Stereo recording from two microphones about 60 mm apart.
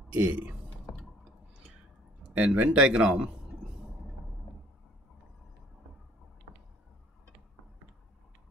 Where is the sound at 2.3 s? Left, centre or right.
Centre.